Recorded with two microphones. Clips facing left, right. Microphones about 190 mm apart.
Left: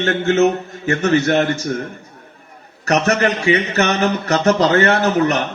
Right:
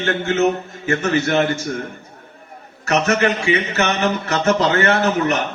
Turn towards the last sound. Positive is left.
turn(degrees=40)  # may be behind; listen again after turning